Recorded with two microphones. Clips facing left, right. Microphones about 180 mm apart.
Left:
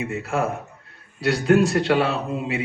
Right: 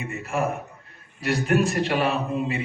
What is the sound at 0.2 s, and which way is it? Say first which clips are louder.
A man's voice: right 1 dB; 90° left.